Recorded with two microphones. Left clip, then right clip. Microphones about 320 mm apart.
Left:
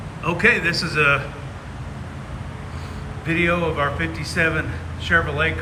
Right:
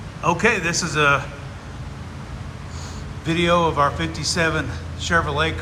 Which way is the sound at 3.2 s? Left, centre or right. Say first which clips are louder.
Right 2 dB; centre.